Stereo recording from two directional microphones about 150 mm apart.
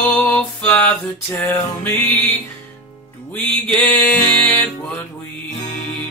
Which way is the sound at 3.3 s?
10° left (ahead or behind).